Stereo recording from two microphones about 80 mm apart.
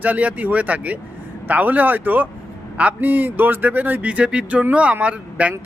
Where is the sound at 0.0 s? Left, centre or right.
Centre.